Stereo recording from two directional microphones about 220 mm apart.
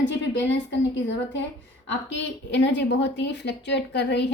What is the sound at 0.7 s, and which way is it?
Speech, 55° left (ahead or behind).